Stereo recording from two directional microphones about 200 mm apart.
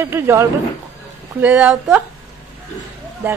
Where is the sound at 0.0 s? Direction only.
15° right (ahead or behind).